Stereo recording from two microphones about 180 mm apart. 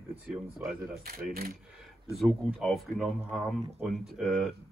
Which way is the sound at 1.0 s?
55° right (ahead or behind).